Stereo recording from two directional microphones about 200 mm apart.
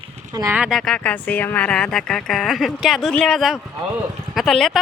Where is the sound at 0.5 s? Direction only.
Centre (ahead or behind).